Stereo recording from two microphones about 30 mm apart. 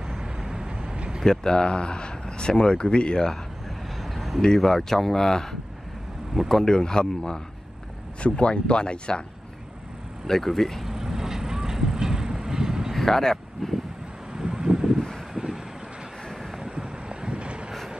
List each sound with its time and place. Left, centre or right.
0.2 s vehicle: right
0.9 s vehicle: right
1.2 s speech: centre
1.5 s speech: left
4.0 s vehicle: centre
4.6 s a man's voice: centre
8.2 s speech: left
10.2 s speech: centre
10.9 s vehicle: centre
12.9 s a sound: centre
14.3 s a sound: right
15.3 s vehicle: centre
16.7 s vehicle: right